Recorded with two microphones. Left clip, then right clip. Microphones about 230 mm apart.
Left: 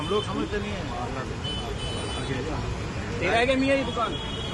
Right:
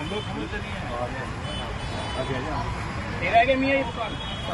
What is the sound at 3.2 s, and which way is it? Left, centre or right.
Speech, centre.